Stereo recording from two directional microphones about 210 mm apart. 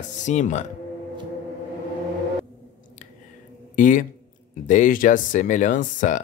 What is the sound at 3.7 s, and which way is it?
Speech, 40° left (ahead or behind).